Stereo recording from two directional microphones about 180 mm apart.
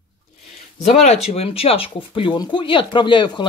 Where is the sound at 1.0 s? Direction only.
35° left (ahead or behind).